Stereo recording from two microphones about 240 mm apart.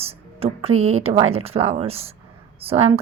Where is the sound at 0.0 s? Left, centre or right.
Right.